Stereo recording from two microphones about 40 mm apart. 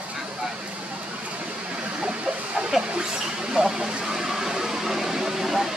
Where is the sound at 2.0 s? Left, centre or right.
Right.